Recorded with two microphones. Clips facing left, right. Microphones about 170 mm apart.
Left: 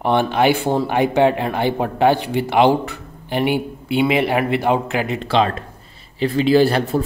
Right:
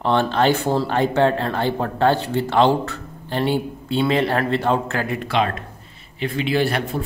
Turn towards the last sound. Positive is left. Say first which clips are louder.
# left 6 dB
turn(degrees=35)  # may be behind; listen again after turning